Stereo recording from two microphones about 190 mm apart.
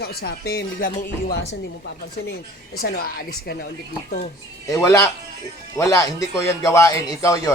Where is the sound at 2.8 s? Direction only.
50° left (ahead or behind).